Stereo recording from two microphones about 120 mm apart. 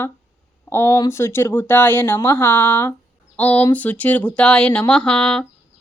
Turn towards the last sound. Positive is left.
turn(degrees=10)  # may be behind; listen again after turning